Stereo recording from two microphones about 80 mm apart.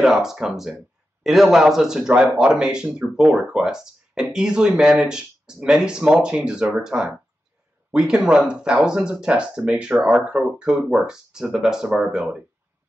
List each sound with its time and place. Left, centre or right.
0.0 s speech: centre